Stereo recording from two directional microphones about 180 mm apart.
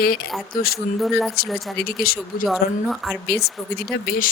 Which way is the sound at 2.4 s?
Centre (ahead or behind).